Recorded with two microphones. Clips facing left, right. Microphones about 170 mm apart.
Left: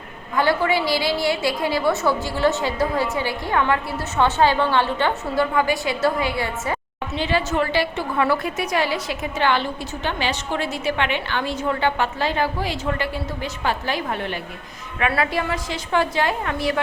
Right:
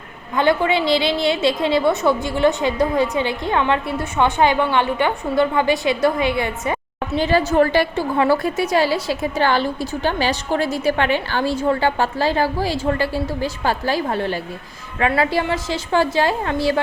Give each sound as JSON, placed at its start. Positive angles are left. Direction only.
{"t": 0.3, "sound": "a woman's voice", "side_deg": -20}
{"t": 7.1, "sound": "a woman's voice", "side_deg": -40}
{"t": 7.9, "sound": "a woman's voice", "side_deg": -30}